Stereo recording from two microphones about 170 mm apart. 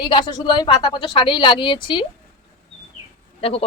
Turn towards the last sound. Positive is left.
turn(degrees=35)  # may be behind; listen again after turning